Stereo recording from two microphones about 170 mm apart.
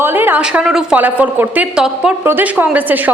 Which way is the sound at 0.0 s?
10° right (ahead or behind).